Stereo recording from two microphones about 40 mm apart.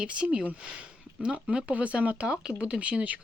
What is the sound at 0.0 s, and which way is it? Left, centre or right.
Speech, right.